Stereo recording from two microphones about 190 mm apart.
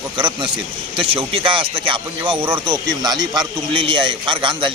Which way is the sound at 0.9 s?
30° right (ahead or behind).